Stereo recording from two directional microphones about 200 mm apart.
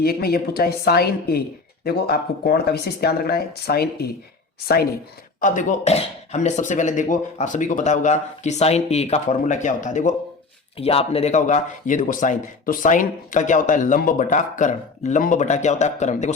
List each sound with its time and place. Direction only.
0.0 s speech: 50° left (ahead or behind)
5.4 s speech: 40° left (ahead or behind)